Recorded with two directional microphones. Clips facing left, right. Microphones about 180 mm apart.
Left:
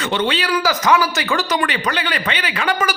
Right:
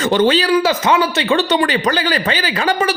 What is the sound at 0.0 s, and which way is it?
A man's voice, 40° right (ahead or behind).